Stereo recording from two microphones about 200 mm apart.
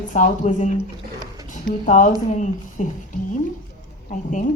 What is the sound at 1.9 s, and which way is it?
Speech, 40° left (ahead or behind).